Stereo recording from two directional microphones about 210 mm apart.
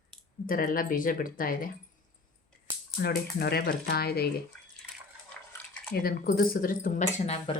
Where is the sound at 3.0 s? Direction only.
50° left (ahead or behind).